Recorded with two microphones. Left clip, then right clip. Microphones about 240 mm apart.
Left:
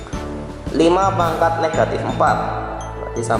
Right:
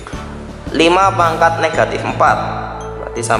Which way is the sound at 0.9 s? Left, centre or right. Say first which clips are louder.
Right 5 dB; centre.